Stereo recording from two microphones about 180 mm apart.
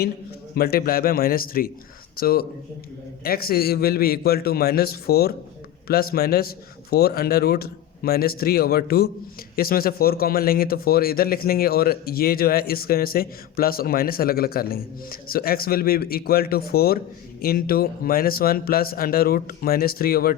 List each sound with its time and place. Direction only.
0.5 s a man's voice: 60° left (ahead or behind)